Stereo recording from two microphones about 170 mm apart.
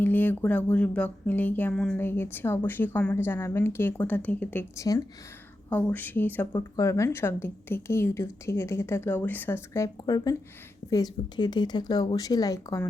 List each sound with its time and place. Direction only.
0.0 s speech: 10° left (ahead or behind)